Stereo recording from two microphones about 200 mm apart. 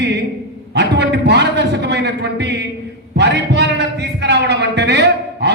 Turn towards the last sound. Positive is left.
turn(degrees=-60)  # may be behind; listen again after turning